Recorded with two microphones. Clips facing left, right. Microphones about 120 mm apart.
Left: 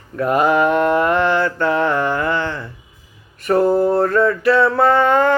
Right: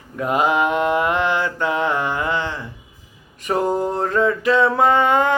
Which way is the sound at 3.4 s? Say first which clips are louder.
Left 5 dB; 15° right (ahead or behind).